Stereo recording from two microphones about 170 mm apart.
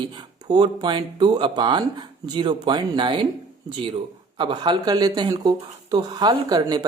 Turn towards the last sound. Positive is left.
turn(degrees=-25)  # may be behind; listen again after turning